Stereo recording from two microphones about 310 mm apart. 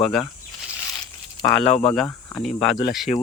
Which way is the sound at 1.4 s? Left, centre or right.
Centre.